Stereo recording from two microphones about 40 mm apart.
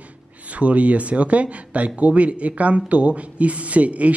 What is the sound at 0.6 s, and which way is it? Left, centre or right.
Speech, right.